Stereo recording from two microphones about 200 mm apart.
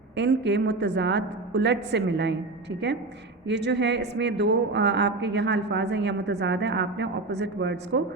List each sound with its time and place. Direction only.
0.2 s a woman's voice: 60° right (ahead or behind)
3.4 s a woman's voice: 60° right (ahead or behind)